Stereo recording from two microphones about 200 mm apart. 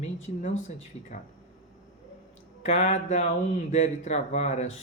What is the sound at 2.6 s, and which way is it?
Speech, 40° left (ahead or behind).